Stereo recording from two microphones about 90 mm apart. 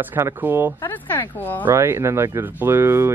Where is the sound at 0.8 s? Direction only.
25° left (ahead or behind).